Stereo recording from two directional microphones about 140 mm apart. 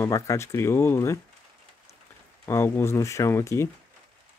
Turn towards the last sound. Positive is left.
turn(degrees=20)  # may be behind; listen again after turning